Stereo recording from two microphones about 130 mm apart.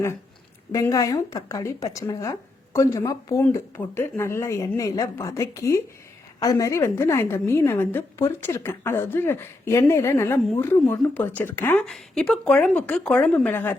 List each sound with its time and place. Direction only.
0.7 s a woman's voice: 25° left (ahead or behind)
11.9 s speech: centre (ahead or behind)